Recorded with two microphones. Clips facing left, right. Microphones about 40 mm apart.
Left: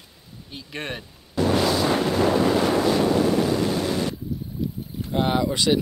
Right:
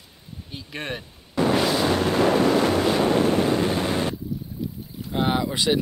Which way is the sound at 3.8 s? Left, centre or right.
Right.